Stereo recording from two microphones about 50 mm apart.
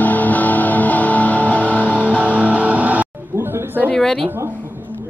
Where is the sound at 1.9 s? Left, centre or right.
Right.